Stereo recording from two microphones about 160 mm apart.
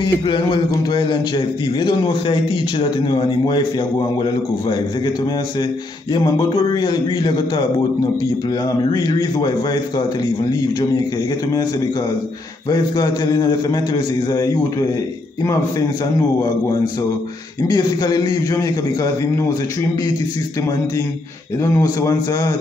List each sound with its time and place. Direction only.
0.0 s speech: 30° left (ahead or behind)
6.1 s a man's voice: 30° left (ahead or behind)
12.6 s a man's voice: 25° left (ahead or behind)
17.6 s a man's voice: 25° left (ahead or behind)
21.7 s a man's voice: 25° left (ahead or behind)